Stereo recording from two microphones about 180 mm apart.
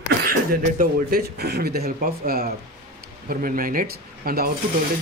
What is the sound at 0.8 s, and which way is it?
Speech, 60° right (ahead or behind).